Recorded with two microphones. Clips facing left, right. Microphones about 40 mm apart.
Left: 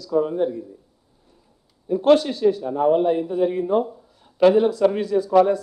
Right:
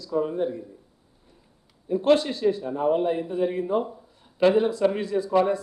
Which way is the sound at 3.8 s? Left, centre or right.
Centre.